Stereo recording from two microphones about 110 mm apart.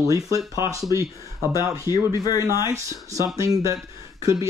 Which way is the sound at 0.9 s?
30° right (ahead or behind).